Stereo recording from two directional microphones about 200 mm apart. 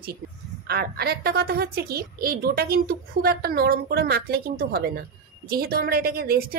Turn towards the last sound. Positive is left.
turn(degrees=-50)  # may be behind; listen again after turning